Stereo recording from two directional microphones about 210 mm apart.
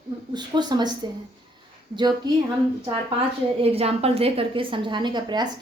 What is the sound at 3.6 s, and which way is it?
A woman's voice, 30° right (ahead or behind).